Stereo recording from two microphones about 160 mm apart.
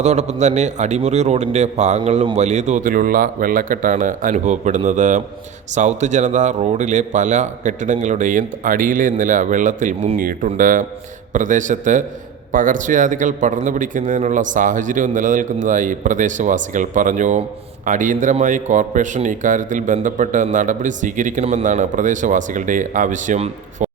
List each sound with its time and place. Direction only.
0.0 s a man's voice: 45° right (ahead or behind)